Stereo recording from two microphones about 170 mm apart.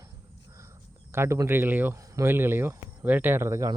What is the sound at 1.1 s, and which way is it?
Speech, 15° right (ahead or behind).